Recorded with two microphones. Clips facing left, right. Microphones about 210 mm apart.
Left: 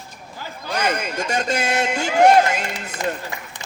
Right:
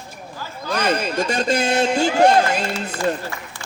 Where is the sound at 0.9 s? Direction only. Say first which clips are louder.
Right 4 dB; 35° right (ahead or behind).